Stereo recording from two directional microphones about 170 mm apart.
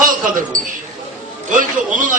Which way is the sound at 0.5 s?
50° right (ahead or behind).